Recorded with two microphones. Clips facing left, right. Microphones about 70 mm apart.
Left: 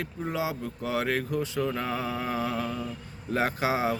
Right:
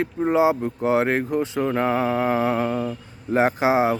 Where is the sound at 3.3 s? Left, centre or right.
Right.